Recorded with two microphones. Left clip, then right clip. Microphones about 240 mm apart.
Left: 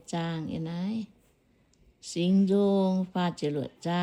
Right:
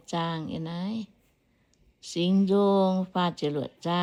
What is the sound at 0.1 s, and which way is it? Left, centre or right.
Speech, centre.